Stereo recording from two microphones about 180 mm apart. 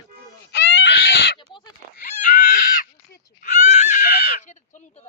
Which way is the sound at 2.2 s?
50° left (ahead or behind).